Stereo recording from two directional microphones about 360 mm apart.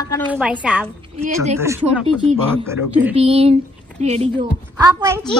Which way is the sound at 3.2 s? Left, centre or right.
Centre.